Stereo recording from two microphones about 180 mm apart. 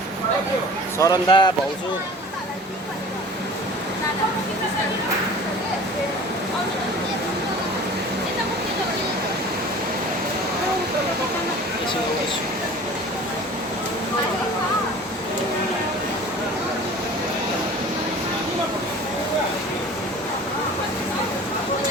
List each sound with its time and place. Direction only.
0.9 s speech: 20° left (ahead or behind)